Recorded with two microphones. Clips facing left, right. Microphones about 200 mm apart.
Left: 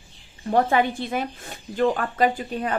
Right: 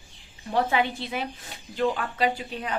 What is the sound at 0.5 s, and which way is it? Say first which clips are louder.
Speech: left 4 dB; 50° left (ahead or behind).